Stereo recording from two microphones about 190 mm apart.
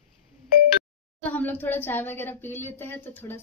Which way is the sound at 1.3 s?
10° left (ahead or behind).